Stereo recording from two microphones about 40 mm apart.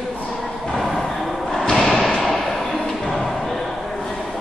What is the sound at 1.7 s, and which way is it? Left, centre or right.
Thump, centre.